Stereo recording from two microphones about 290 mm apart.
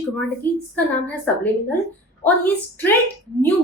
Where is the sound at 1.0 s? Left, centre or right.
Centre.